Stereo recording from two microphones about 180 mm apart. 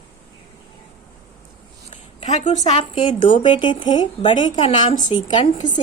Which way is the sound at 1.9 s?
40° left (ahead or behind).